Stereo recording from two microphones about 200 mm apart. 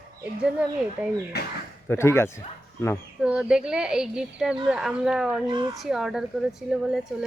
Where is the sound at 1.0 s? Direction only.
5° right (ahead or behind).